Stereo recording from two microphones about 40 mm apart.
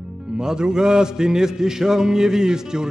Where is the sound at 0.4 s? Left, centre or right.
Centre.